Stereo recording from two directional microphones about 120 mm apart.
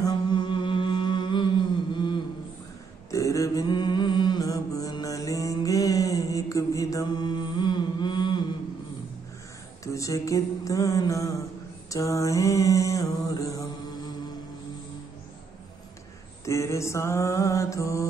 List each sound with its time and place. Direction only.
0.0 s mantra: 40° left (ahead or behind)
3.1 s mantra: 25° left (ahead or behind)
9.9 s mantra: 25° left (ahead or behind)
16.4 s mantra: 25° left (ahead or behind)